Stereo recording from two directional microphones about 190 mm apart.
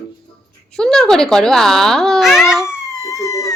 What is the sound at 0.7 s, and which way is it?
Speech, 5° left (ahead or behind).